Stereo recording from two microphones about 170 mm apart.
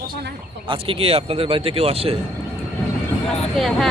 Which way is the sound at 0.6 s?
30° right (ahead or behind).